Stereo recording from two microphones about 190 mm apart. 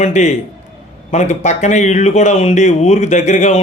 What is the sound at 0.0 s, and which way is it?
Speech, 40° left (ahead or behind).